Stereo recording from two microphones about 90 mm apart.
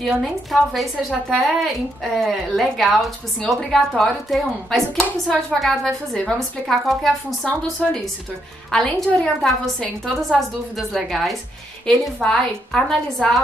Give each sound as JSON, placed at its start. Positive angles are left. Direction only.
{"t": 0.0, "sound": "a woman's voice", "side_deg": 0}